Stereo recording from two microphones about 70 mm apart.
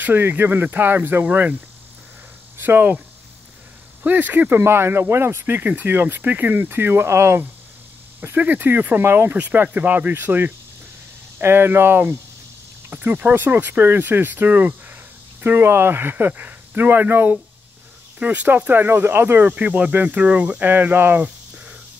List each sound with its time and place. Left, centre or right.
0.0 s speech: right
4.0 s speech: right
4.6 s speech: right
8.4 s speech: right